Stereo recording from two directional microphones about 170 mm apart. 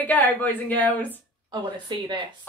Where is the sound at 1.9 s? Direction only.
25° right (ahead or behind).